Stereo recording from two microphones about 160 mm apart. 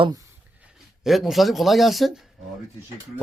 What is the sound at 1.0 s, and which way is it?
Speech, centre (ahead or behind).